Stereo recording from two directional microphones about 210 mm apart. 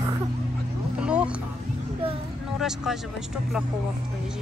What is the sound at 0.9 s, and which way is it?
Speech, 5° right (ahead or behind).